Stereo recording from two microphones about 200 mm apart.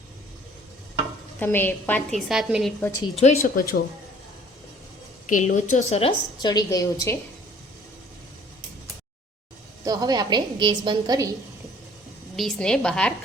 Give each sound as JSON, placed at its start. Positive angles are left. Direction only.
{"t": 1.4, "sound": "a woman's voice", "side_deg": 10}
{"t": 3.4, "sound": "speech", "side_deg": 45}
{"t": 5.3, "sound": "a woman's voice", "side_deg": 40}
{"t": 9.8, "sound": "a woman's voice", "side_deg": -20}
{"t": 12.4, "sound": "a woman's voice", "side_deg": 0}